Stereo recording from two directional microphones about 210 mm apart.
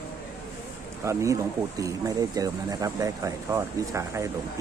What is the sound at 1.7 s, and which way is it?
Speech, 15° right (ahead or behind).